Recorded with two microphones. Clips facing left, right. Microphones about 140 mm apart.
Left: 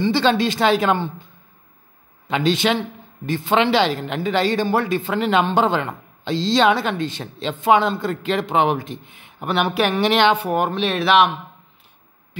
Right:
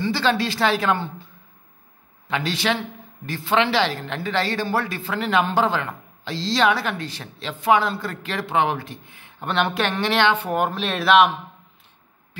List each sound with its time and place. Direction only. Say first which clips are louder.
0.0 s speech: left 4 dB; 20° left (ahead or behind)
9.4 s speech: left 3 dB; 10° left (ahead or behind)